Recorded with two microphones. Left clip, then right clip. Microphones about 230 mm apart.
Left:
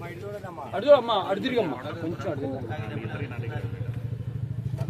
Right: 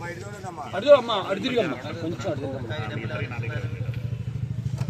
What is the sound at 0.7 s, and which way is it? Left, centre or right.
Speech, centre.